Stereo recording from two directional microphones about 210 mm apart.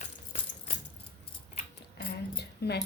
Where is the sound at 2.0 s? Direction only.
50° left (ahead or behind).